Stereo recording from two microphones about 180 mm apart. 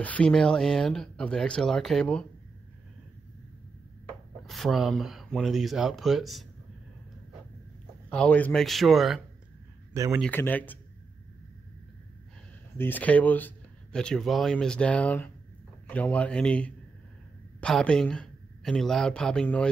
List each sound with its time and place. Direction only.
0.0 s speech: 5° left (ahead or behind)
4.5 s speech: centre (ahead or behind)
8.1 s speech: 5° left (ahead or behind)
9.9 s speech: 15° right (ahead or behind)
10.2 s speech: 10° left (ahead or behind)
12.7 s speech: 10° left (ahead or behind)